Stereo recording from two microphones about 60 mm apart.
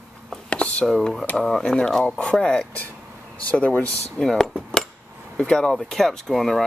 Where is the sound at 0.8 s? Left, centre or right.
Centre.